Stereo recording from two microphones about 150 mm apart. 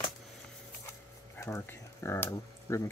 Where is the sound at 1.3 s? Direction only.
20° left (ahead or behind).